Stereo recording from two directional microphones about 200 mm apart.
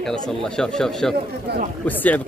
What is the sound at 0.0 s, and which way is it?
Speech, centre (ahead or behind).